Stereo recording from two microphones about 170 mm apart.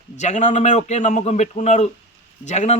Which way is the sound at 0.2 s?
45° left (ahead or behind).